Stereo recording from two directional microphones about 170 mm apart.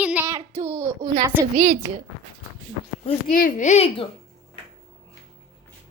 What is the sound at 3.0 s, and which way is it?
Speech, 50° left (ahead or behind).